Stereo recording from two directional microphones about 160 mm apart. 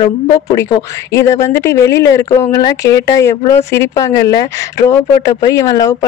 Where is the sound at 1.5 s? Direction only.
15° left (ahead or behind).